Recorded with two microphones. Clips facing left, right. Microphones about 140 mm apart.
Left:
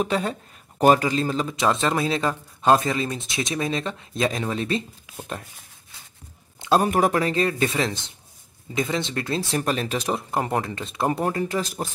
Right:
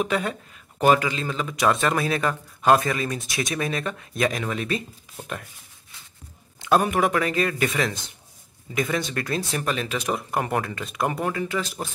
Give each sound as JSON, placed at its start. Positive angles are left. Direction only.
{"t": 0.0, "sound": "speech", "side_deg": 30}
{"t": 6.6, "sound": "speech", "side_deg": 30}